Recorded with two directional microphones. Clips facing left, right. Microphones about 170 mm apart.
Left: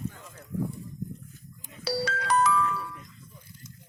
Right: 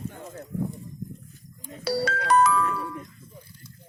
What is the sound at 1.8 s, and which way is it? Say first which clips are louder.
Music: right 3 dB; 55° right (ahead or behind).